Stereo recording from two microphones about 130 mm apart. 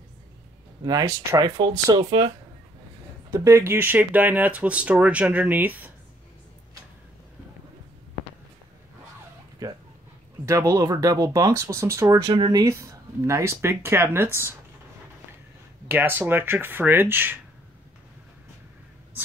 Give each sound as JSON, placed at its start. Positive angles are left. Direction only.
{"t": 0.8, "sound": "speech", "side_deg": -25}
{"t": 3.3, "sound": "speech", "side_deg": -20}
{"t": 9.6, "sound": "a sound", "side_deg": -25}
{"t": 10.4, "sound": "speech", "side_deg": -25}
{"t": 12.2, "sound": "speech", "side_deg": -35}
{"t": 15.9, "sound": "speech", "side_deg": -15}